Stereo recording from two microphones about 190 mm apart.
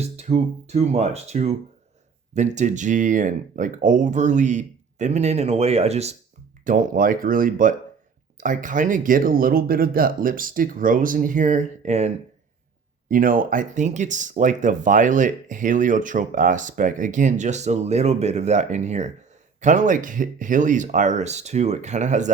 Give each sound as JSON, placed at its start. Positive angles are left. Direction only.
{"t": 0.0, "sound": "speech", "side_deg": -35}
{"t": 13.1, "sound": "speech", "side_deg": -45}